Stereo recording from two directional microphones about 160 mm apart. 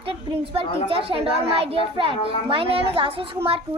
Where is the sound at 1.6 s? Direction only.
35° right (ahead or behind).